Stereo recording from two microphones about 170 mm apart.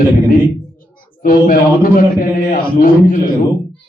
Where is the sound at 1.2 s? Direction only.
55° left (ahead or behind).